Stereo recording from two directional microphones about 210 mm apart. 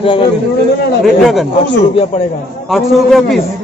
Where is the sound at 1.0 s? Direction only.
Centre (ahead or behind).